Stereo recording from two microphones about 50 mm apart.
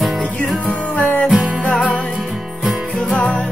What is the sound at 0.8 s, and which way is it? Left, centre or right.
Music, left.